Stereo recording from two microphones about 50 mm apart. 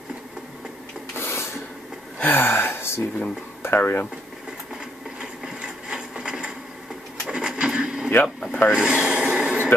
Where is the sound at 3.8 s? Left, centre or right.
Left.